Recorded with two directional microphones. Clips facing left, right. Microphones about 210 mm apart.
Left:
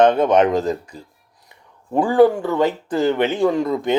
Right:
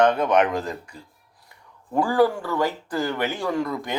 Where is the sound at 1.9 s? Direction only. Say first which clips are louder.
Left 6 dB; 20° left (ahead or behind).